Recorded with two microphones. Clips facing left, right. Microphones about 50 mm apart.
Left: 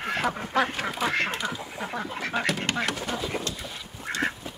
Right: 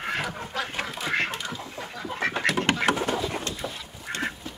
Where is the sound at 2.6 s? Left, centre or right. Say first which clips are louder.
Right 5 dB; right.